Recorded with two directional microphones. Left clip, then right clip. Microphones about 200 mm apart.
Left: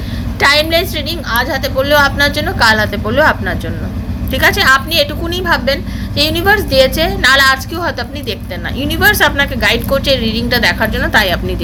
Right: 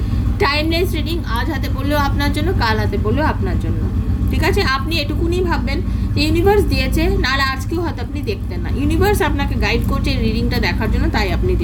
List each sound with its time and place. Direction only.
0.3 s a sound: 10° right (ahead or behind)
0.9 s a woman's voice: 15° right (ahead or behind)
9.0 s a woman's voice: 10° right (ahead or behind)
10.2 s speech: 40° left (ahead or behind)
10.5 s a woman's voice: 10° right (ahead or behind)
11.2 s speech: 40° left (ahead or behind)